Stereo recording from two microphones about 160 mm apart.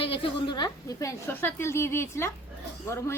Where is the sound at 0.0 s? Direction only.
35° left (ahead or behind).